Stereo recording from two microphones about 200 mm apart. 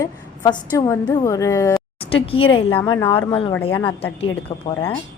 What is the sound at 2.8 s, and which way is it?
Speech, 15° left (ahead or behind).